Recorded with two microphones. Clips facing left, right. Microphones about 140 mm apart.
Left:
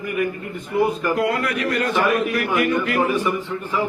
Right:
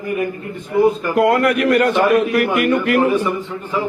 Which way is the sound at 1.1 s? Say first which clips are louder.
Right 7 dB; 50° right (ahead or behind).